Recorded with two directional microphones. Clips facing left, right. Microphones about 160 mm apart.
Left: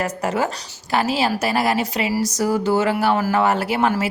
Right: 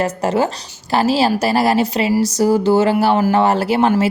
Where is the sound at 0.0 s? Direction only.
30° right (ahead or behind).